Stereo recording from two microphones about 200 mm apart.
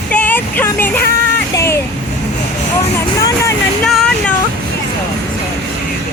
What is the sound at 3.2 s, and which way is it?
Music, 15° left (ahead or behind).